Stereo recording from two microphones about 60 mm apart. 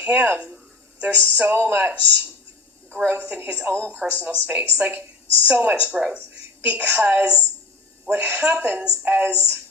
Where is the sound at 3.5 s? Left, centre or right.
Right.